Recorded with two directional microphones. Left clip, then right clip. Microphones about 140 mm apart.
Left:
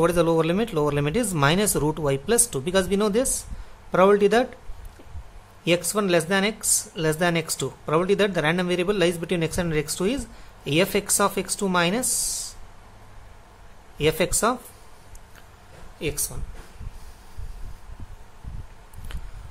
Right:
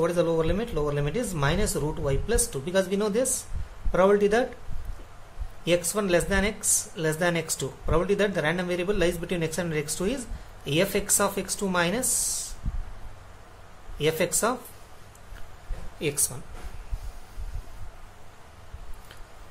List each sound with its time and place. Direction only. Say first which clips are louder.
0.0 s speech: left 4 dB; 55° left (ahead or behind); by 4.5 s 40° left (ahead or behind)
5.7 s speech: left 2 dB; 40° left (ahead or behind)
12.1 s speech: left 1 dB; 10° left (ahead or behind)
13.9 s speech: left 3 dB; 35° left (ahead or behind)
16.0 s speech: even; 15° left (ahead or behind)